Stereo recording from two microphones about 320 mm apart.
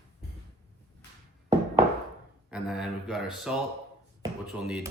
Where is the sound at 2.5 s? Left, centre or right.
Centre.